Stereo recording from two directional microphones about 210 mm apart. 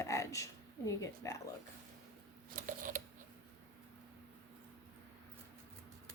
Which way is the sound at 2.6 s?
40° right (ahead or behind).